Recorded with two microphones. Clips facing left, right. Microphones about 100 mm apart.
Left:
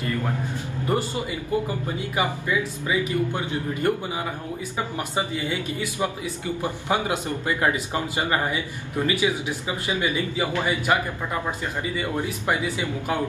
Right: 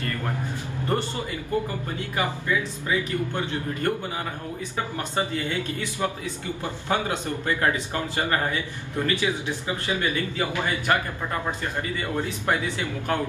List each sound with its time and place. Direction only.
0.8 s speech: 10° left (ahead or behind)
12.0 s speech: 15° left (ahead or behind)